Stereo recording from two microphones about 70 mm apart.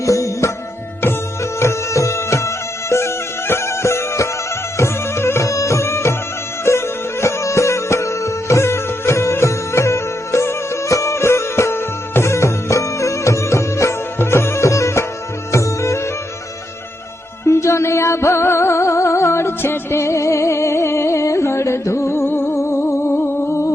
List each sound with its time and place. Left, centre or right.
0.0 s music: left
1.5 s music: left
17.4 s music: left